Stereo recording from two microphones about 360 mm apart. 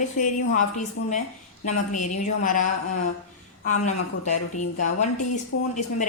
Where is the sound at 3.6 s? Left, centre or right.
Centre.